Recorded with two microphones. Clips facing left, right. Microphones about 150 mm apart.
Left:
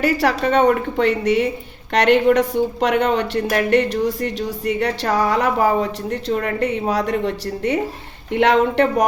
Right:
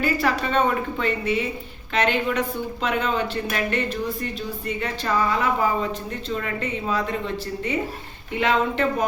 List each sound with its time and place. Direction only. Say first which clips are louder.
0.0 s speech: left 5 dB; 80° left